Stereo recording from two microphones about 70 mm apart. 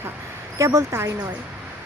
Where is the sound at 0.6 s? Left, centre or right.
Right.